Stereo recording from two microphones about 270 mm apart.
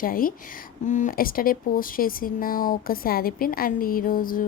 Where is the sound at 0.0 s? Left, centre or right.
Left.